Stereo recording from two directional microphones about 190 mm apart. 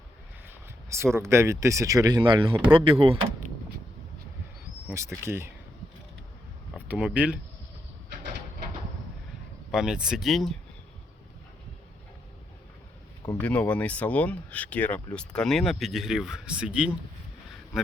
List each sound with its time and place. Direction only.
0.4 s a sound: 15° right (ahead or behind)
1.1 s speech: 15° right (ahead or behind)
4.9 s speech: 15° right (ahead or behind)
6.7 s speech: 5° right (ahead or behind)
9.7 s speech: 5° right (ahead or behind)
13.3 s speech: 10° left (ahead or behind)